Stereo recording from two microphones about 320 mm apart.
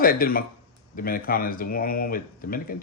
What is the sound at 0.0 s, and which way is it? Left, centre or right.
Speech, left.